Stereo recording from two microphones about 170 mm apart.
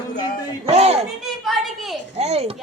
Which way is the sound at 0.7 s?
35° right (ahead or behind).